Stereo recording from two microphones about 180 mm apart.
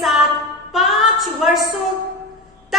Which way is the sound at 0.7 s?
Centre (ahead or behind).